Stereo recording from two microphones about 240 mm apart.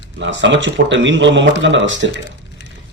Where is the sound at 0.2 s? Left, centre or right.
Right.